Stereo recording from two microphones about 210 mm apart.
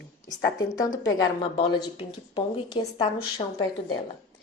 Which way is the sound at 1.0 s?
20° left (ahead or behind).